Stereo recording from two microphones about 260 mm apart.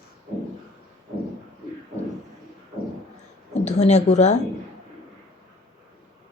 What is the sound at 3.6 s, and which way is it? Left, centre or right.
Speech, left.